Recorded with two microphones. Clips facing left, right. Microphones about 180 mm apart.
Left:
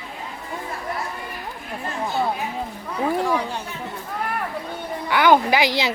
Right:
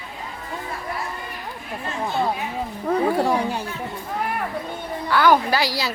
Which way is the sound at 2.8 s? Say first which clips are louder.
Right 4 dB; 40° right (ahead or behind).